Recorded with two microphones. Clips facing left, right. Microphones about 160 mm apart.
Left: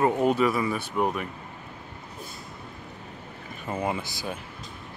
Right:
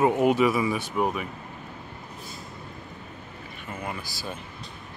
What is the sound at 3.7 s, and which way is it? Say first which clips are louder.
Speech: left 6 dB; 25° left (ahead or behind).